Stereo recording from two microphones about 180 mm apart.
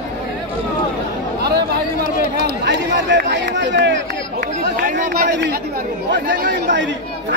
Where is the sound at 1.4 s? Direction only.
65° right (ahead or behind).